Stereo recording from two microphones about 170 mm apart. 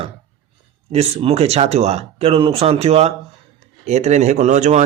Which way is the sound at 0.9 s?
35° right (ahead or behind).